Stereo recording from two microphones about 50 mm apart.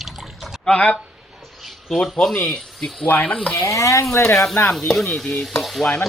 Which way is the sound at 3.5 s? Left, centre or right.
Left.